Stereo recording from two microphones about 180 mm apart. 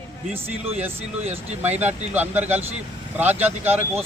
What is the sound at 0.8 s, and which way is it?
Speech, 10° right (ahead or behind).